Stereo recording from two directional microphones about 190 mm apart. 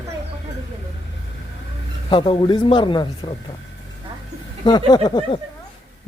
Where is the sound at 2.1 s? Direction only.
25° left (ahead or behind).